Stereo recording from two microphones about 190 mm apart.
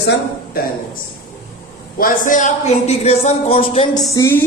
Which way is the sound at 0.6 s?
50° left (ahead or behind).